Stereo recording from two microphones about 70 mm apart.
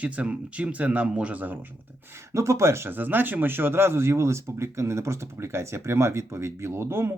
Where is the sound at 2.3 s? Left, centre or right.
Right.